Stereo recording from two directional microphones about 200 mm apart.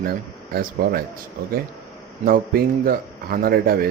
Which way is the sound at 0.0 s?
50° right (ahead or behind).